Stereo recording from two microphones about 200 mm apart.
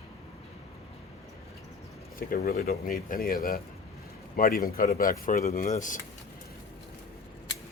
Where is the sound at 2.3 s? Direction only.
50° left (ahead or behind).